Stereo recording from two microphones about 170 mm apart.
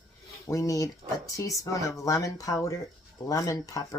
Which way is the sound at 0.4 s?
20° left (ahead or behind).